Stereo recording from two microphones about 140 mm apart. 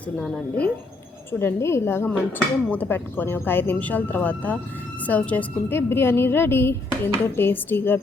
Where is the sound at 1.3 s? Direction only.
20° left (ahead or behind).